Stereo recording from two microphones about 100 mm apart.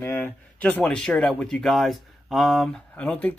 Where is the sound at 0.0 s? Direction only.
20° left (ahead or behind).